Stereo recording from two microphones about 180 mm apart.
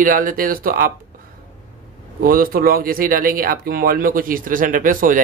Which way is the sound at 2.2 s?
55° right (ahead or behind).